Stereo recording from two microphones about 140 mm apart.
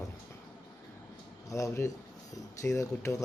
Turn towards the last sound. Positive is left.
turn(degrees=20)  # may be behind; listen again after turning